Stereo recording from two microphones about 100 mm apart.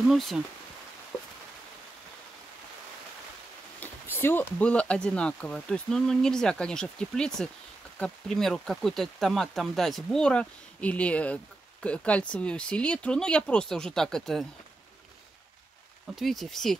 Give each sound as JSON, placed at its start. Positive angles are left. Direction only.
{"t": 0.1, "sound": "speech", "side_deg": 0}
{"t": 3.8, "sound": "speech", "side_deg": 20}
{"t": 16.2, "sound": "speech", "side_deg": 0}